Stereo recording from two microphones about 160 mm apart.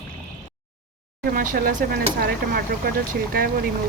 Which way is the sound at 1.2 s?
60° right (ahead or behind).